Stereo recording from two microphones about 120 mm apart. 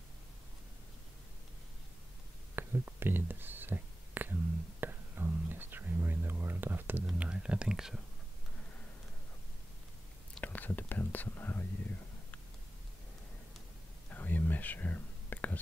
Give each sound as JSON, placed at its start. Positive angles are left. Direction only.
{"t": 2.5, "sound": "whispering", "side_deg": -20}
{"t": 7.1, "sound": "speech", "side_deg": -10}
{"t": 10.3, "sound": "whispering", "side_deg": 15}
{"t": 14.1, "sound": "whispering", "side_deg": 15}